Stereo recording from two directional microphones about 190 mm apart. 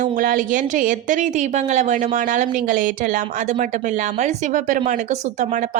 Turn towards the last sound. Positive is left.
turn(degrees=-40)  # may be behind; listen again after turning